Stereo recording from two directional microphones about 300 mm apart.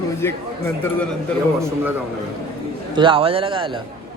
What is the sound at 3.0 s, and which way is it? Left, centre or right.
Speech, centre.